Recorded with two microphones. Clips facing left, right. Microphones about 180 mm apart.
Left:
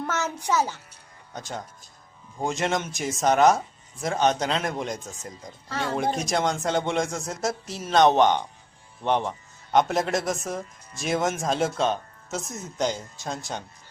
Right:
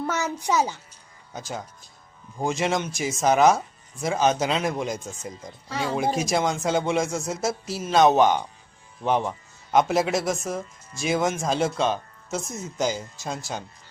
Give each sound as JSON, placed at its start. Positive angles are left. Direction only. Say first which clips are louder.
{"t": 0.0, "sound": "music", "louder": "right 2 dB", "side_deg": -10}
{"t": 0.4, "sound": "a child's voice", "louder": "right 1 dB", "side_deg": -15}
{"t": 1.3, "sound": "speech", "louder": "right 1 dB", "side_deg": -5}